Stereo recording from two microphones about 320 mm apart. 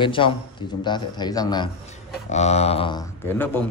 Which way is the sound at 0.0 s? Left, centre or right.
Centre.